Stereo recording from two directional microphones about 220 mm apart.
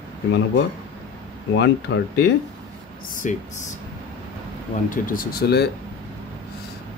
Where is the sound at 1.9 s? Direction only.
50° left (ahead or behind).